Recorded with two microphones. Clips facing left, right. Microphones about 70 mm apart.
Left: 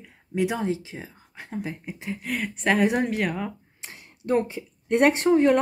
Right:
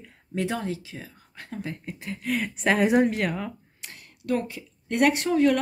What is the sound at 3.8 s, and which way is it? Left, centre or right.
A woman's voice, left.